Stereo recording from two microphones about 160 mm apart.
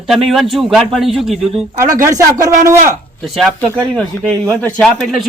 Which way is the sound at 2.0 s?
20° right (ahead or behind).